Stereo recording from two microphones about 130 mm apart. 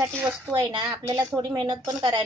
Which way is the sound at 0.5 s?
35° right (ahead or behind).